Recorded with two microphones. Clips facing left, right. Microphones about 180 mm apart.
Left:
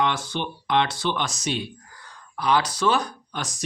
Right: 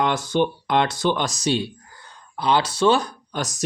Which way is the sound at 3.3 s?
40° right (ahead or behind).